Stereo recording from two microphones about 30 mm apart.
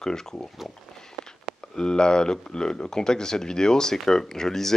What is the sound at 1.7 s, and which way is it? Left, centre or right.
Speech, left.